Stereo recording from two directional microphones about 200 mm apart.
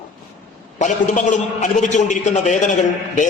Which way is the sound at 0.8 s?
40° left (ahead or behind).